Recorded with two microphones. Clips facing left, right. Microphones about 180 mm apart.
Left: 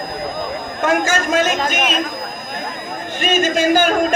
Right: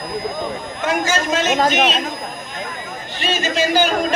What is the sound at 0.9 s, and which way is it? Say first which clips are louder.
Speech: left 2 dB; 50° left (ahead or behind).